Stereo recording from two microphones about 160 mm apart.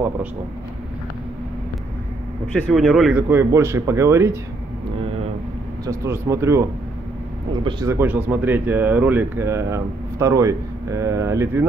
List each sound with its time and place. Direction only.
2.4 s speech: 5° left (ahead or behind)
3.2 s speech: 15° right (ahead or behind)
5.9 s speech: 20° right (ahead or behind)
7.8 s speech: 15° right (ahead or behind)